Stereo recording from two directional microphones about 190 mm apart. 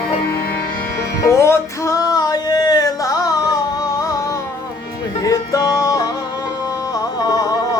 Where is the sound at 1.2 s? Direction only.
15° left (ahead or behind).